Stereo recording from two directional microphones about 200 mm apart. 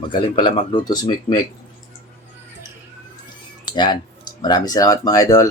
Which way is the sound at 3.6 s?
20° left (ahead or behind).